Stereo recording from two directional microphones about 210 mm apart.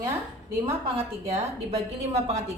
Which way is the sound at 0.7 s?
30° right (ahead or behind).